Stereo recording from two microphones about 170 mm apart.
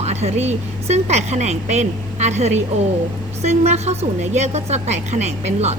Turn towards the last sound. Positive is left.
turn(degrees=-40)  # may be behind; listen again after turning